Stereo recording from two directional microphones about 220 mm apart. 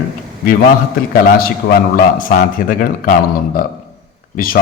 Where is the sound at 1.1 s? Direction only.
40° left (ahead or behind).